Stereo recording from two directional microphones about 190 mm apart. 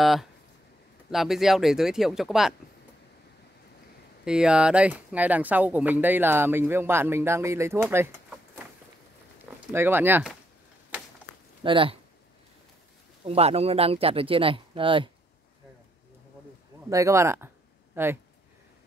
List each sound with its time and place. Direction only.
0.0 s speech: centre (ahead or behind)
4.2 s speech: 5° right (ahead or behind)
9.7 s speech: 10° right (ahead or behind)
11.6 s speech: 25° right (ahead or behind)
13.2 s speech: 30° right (ahead or behind)
16.9 s speech: 15° right (ahead or behind)